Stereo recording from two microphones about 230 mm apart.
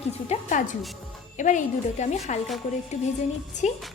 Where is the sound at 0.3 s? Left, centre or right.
Left.